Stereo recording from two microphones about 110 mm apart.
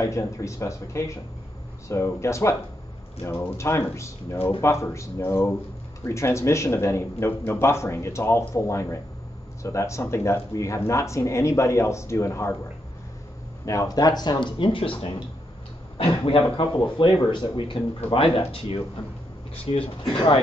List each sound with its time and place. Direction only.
0.0 s speech: 30° left (ahead or behind)
13.7 s a man's voice: 30° left (ahead or behind); by 19.8 s 50° left (ahead or behind)